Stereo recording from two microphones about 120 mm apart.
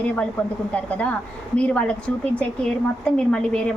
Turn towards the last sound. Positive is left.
turn(degrees=10)  # may be behind; listen again after turning